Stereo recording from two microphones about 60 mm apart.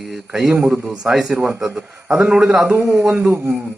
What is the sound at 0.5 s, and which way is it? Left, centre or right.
Speech, centre.